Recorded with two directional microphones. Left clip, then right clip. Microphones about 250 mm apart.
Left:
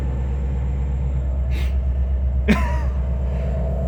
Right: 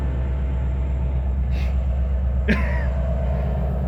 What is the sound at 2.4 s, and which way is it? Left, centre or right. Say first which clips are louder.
Cough: left 2 dB; left.